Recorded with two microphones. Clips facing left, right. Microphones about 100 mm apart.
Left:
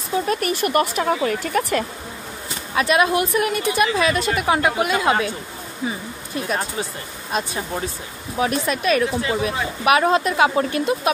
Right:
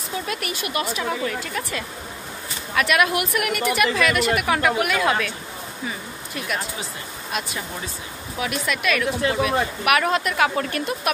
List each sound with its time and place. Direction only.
0.3 s a woman's voice: 45° left (ahead or behind)
2.7 s speech: 30° left (ahead or behind)